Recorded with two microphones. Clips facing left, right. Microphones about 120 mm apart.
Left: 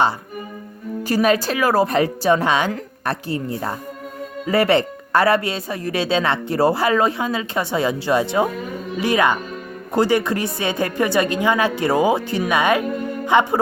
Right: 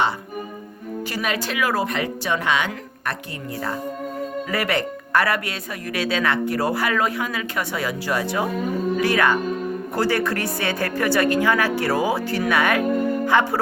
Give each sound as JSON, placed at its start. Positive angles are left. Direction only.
{"t": 1.0, "sound": "a woman's voice", "side_deg": 40}